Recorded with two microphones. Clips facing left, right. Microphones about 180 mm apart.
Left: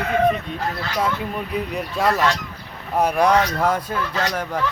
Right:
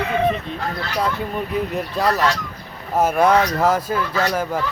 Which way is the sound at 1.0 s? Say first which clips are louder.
Right 1 dB; centre (ahead or behind).